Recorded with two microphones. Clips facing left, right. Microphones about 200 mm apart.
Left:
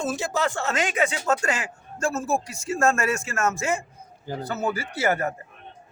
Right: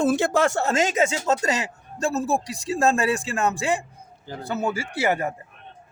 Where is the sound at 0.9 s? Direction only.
25° right (ahead or behind).